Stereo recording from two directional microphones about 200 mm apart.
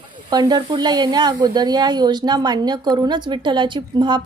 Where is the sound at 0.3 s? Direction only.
20° right (ahead or behind).